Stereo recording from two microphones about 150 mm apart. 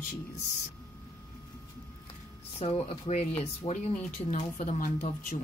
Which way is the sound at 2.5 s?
40° left (ahead or behind).